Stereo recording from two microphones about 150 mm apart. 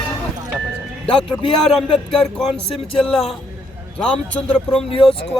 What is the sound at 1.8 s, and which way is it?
Speech, 5° left (ahead or behind).